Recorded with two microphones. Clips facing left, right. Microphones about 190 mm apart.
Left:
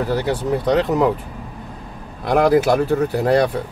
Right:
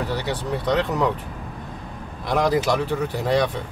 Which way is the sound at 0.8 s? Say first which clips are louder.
Left 5 dB; 40° left (ahead or behind).